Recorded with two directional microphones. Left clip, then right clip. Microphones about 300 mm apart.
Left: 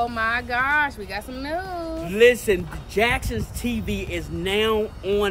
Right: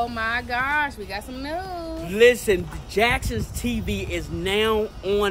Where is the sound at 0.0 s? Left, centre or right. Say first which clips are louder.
Left 2 dB; centre.